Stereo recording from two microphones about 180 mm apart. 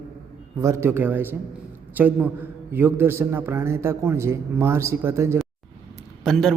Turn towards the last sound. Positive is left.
turn(degrees=0)  # may be behind; listen again after turning